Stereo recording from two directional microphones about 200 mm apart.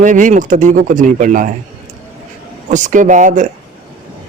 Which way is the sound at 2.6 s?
40° right (ahead or behind).